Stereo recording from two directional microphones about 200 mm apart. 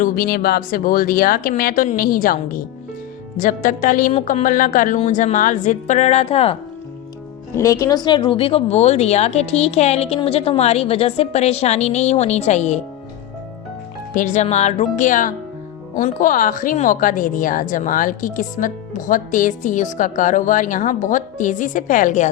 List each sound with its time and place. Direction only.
0.0 s a woman's voice: 50° left (ahead or behind); by 6.6 s 30° left (ahead or behind)
7.5 s a woman's voice: 15° left (ahead or behind); by 12.8 s 35° left (ahead or behind)
14.1 s a woman's voice: 40° left (ahead or behind)